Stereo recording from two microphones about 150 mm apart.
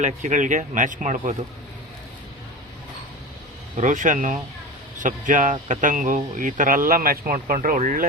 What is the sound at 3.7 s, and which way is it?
Speech, 55° right (ahead or behind).